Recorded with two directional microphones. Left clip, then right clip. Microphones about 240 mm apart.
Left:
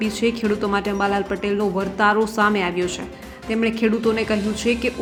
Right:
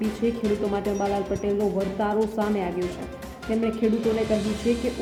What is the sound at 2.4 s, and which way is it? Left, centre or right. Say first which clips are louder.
Speech: left 7 dB; centre.